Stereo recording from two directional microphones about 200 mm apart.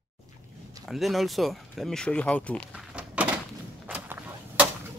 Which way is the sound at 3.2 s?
5° right (ahead or behind).